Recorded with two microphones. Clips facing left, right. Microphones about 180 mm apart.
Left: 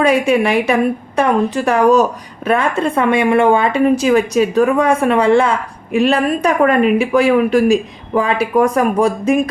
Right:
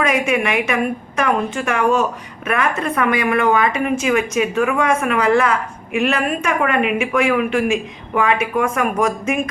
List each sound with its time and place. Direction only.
0.0 s a woman's voice: 30° left (ahead or behind)